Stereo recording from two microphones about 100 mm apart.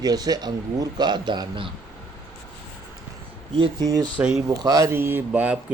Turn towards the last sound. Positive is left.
turn(degrees=-15)  # may be behind; listen again after turning